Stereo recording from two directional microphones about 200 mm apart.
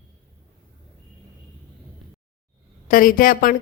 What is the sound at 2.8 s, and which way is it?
Speech, 45° left (ahead or behind).